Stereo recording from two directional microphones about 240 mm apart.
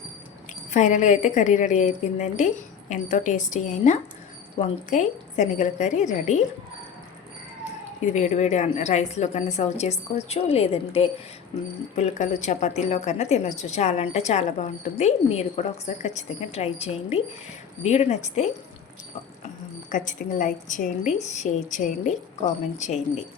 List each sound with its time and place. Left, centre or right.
0.7 s speech: left
8.1 s a woman's voice: left
19.9 s speech: left